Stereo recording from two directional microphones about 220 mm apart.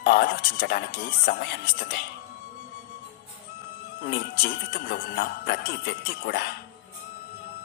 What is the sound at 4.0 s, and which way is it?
Speech, 45° left (ahead or behind).